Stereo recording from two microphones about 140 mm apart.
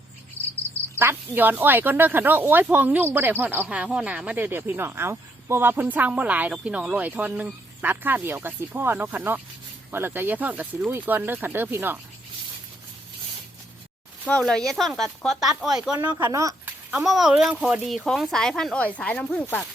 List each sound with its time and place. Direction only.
0.9 s speech: 15° right (ahead or behind)
14.3 s speech: 5° left (ahead or behind)
16.2 s speech: 25° right (ahead or behind)
16.9 s speech: 5° right (ahead or behind)